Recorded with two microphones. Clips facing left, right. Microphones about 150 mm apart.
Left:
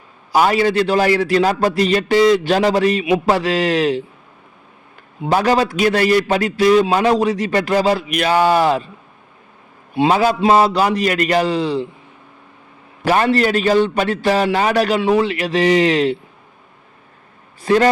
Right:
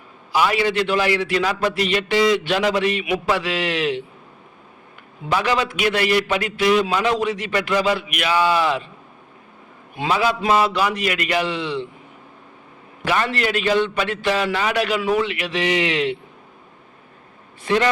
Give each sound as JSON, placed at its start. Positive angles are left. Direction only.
{"t": 0.3, "sound": "a man's voice", "side_deg": 40}
{"t": 5.3, "sound": "a man's voice", "side_deg": 40}
{"t": 9.9, "sound": "a man's voice", "side_deg": 35}
{"t": 13.1, "sound": "a man's voice", "side_deg": 40}
{"t": 17.6, "sound": "a man's voice", "side_deg": 35}